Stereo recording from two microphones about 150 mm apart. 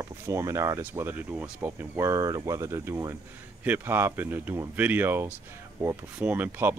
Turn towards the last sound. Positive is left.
turn(degrees=-10)  # may be behind; listen again after turning